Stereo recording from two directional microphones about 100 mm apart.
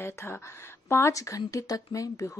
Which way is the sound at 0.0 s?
25° left (ahead or behind).